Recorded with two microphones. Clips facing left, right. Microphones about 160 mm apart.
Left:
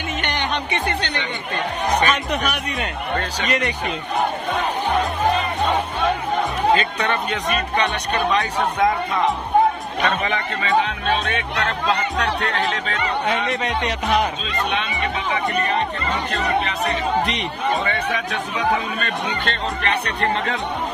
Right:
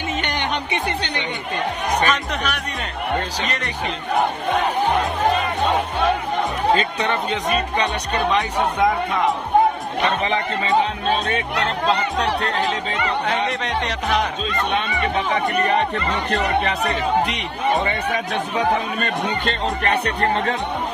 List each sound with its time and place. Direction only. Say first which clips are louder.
0.4 s a sound: even; 15° right (ahead or behind)
2.0 s speech: left 1 dB; 5° left (ahead or behind)
6.8 s speech: right 1 dB; 25° right (ahead or behind)
10.0 s speech: right 1 dB; 25° right (ahead or behind)
13.5 s speech: left 1 dB; 5° left (ahead or behind)
19.4 s speech: right 2 dB; 40° right (ahead or behind)